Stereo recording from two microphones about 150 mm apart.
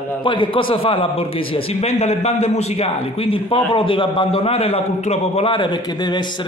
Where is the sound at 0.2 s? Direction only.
30° left (ahead or behind).